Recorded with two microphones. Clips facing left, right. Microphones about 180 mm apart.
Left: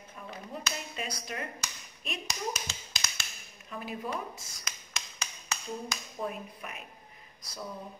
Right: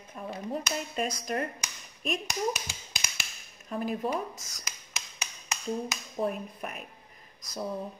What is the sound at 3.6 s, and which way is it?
Speech, 40° right (ahead or behind).